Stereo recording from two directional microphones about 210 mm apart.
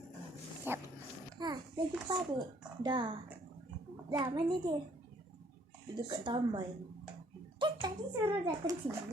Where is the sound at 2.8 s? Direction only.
20° right (ahead or behind).